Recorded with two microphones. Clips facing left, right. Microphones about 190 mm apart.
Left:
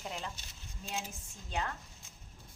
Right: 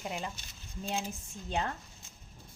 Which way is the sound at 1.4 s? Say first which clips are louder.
Right 4 dB; 30° right (ahead or behind).